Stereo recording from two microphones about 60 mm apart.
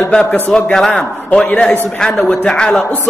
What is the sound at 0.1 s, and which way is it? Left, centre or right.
A man's voice, centre.